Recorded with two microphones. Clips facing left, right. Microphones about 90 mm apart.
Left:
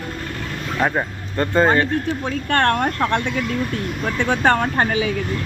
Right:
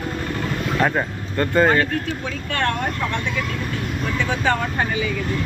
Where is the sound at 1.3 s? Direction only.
20° left (ahead or behind).